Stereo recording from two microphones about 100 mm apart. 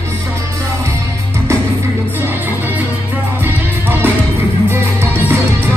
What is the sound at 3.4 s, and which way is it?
Music, 20° right (ahead or behind).